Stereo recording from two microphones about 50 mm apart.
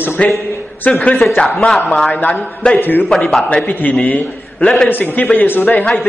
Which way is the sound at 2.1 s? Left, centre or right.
Left.